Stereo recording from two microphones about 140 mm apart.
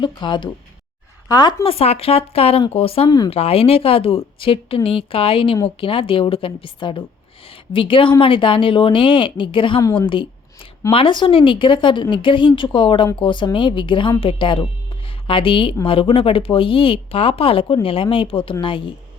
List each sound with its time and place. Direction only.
0.0 s a woman's voice: 35° left (ahead or behind)
1.7 s a woman's voice: 45° left (ahead or behind)
10.1 s a sound: 35° left (ahead or behind)
10.9 s a woman's voice: 35° left (ahead or behind)